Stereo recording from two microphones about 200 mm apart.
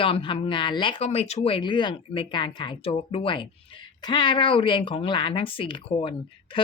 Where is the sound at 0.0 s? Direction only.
25° left (ahead or behind).